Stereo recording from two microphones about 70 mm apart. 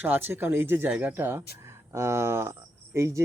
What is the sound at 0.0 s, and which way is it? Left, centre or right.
Speech, right.